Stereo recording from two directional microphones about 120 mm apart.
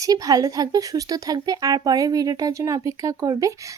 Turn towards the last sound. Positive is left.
turn(degrees=-25)  # may be behind; listen again after turning